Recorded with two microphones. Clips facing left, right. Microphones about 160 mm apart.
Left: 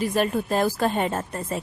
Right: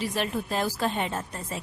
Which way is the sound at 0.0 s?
45° left (ahead or behind).